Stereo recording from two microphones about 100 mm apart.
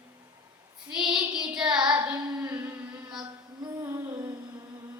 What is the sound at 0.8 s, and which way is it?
Child singing, 5° right (ahead or behind).